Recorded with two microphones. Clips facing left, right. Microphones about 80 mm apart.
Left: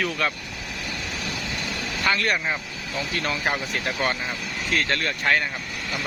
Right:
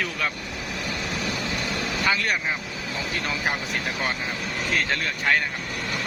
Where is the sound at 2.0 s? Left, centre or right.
Centre.